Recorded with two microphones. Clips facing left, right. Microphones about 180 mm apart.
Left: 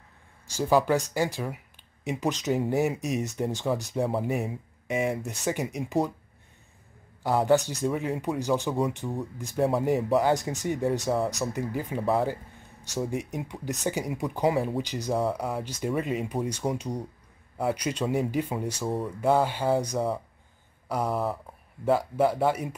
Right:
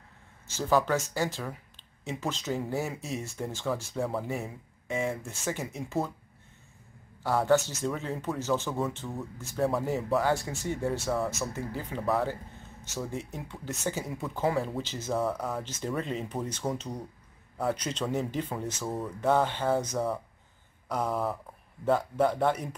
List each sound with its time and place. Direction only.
0.5 s speech: 15° left (ahead or behind)
7.2 s speech: 15° left (ahead or behind)
12.3 s speech: 15° left (ahead or behind)